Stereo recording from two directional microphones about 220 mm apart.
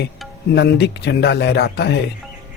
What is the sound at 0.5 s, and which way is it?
Speech, 50° left (ahead or behind).